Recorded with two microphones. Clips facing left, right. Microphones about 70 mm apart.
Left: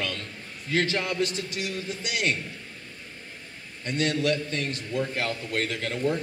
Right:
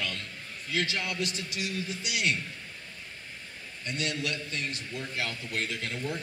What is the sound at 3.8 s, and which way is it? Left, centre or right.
A man's voice, left.